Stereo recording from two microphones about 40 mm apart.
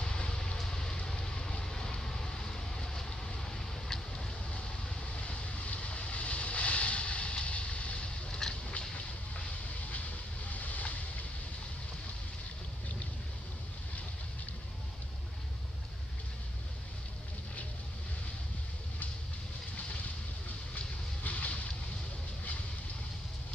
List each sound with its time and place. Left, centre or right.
0.0 s a sound: centre
0.6 s vehicle: centre
4.5 s vehicle: left
8.3 s a sound: centre
8.7 s boat: left
9.8 s vehicle: left
21.2 s boat: left